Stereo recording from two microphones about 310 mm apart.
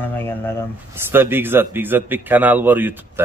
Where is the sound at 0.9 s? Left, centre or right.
Centre.